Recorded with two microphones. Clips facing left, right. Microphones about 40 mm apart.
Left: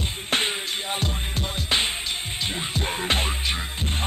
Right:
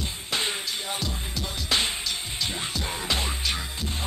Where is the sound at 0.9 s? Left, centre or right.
Left.